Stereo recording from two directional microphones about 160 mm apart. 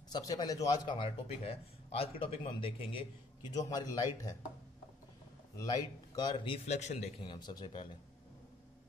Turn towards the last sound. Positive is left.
turn(degrees=30)  # may be behind; listen again after turning